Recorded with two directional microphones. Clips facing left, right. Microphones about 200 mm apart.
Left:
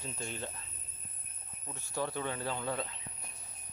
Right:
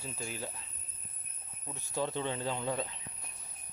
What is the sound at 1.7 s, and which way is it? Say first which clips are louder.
Speech: right 2 dB; 15° right (ahead or behind).